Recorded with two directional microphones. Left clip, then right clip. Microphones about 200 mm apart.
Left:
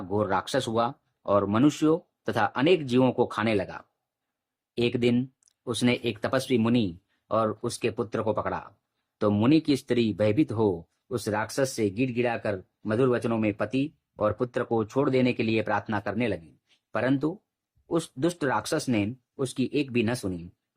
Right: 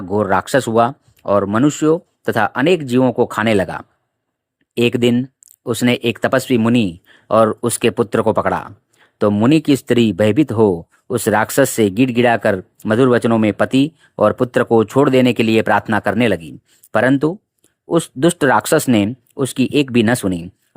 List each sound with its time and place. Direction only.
0.1 s speech: 35° right (ahead or behind)